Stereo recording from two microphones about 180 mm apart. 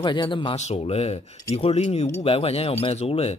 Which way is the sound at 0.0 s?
25° left (ahead or behind).